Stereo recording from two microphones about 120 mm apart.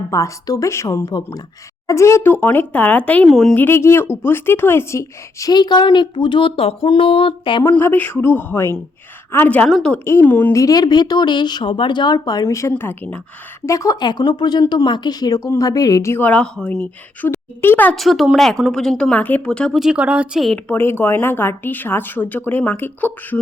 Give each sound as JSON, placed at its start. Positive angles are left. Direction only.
{"t": 0.1, "sound": "speech", "side_deg": 30}
{"t": 3.2, "sound": "speech", "side_deg": 0}
{"t": 3.5, "sound": "a woman's voice", "side_deg": 20}
{"t": 7.6, "sound": "speech", "side_deg": 20}
{"t": 9.6, "sound": "speech", "side_deg": 0}
{"t": 9.9, "sound": "speech", "side_deg": 20}
{"t": 10.5, "sound": "a woman's voice", "side_deg": 30}
{"t": 13.7, "sound": "a woman's voice", "side_deg": 30}
{"t": 17.9, "sound": "speech", "side_deg": 0}
{"t": 19.8, "sound": "speech", "side_deg": -10}
{"t": 20.7, "sound": "speech", "side_deg": 20}